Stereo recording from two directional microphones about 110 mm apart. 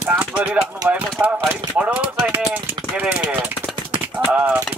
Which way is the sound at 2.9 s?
10° right (ahead or behind).